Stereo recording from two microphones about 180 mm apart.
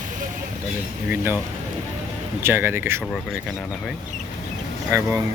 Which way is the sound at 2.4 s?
10° right (ahead or behind).